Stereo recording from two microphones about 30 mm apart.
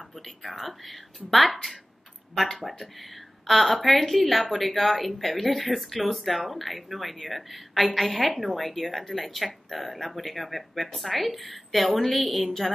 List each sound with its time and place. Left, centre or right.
0.4 s a woman's voice: centre